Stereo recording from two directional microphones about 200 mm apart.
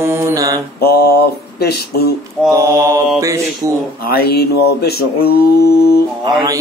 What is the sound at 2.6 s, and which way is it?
Speech, 15° right (ahead or behind).